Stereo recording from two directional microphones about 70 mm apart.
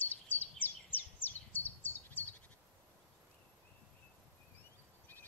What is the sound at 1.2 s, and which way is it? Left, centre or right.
Bird, left.